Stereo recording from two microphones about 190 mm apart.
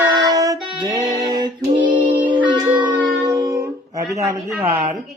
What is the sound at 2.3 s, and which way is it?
Child singing, 25° right (ahead or behind).